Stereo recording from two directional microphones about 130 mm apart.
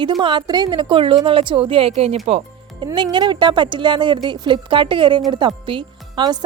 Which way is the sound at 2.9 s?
35° right (ahead or behind).